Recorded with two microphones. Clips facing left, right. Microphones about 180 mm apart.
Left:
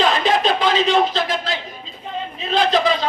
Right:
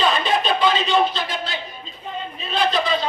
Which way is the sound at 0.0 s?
90° left.